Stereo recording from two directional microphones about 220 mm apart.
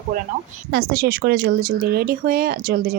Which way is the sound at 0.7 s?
45° right (ahead or behind).